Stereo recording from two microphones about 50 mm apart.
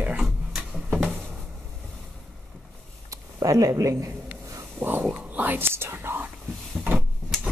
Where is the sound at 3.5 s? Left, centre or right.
Right.